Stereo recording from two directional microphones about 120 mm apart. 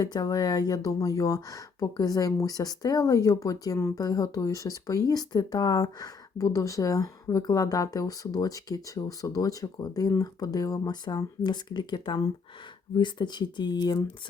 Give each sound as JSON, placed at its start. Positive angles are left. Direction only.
{"t": 0.0, "sound": "speech", "side_deg": 35}